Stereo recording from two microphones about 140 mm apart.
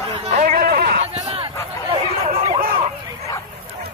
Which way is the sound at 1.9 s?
40° right (ahead or behind).